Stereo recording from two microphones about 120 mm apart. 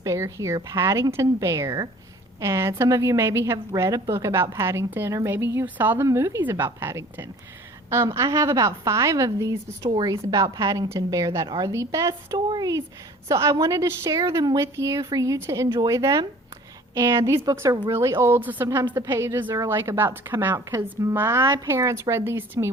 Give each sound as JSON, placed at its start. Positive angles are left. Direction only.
{"t": 0.0, "sound": "a woman's voice", "side_deg": -25}